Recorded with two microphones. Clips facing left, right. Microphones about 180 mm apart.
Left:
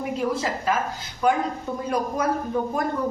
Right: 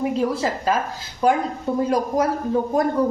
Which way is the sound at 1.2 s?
30° right (ahead or behind).